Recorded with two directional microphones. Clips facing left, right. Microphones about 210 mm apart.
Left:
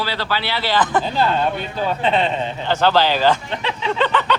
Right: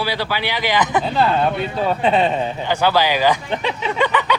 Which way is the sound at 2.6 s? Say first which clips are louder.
Left 2 dB; 10° right (ahead or behind).